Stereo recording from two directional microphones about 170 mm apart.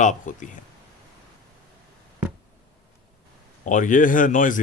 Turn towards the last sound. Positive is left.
turn(degrees=50)  # may be behind; listen again after turning